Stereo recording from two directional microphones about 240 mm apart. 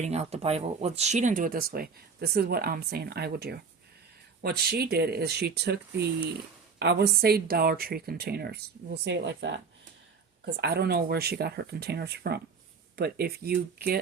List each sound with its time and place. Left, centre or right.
0.0 s speech: right